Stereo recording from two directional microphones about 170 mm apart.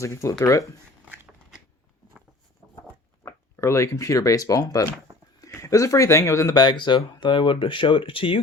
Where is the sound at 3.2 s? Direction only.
15° left (ahead or behind).